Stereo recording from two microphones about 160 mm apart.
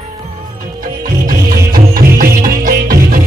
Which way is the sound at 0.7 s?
60° right (ahead or behind).